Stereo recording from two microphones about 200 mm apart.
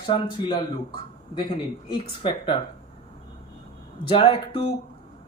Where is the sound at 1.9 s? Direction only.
25° left (ahead or behind).